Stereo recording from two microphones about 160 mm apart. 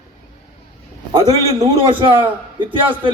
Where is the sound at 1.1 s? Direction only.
25° right (ahead or behind).